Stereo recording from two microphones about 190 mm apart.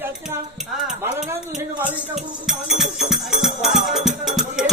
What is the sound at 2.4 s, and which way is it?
Music, centre (ahead or behind).